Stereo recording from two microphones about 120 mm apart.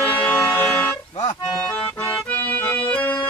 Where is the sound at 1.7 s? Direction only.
5° left (ahead or behind).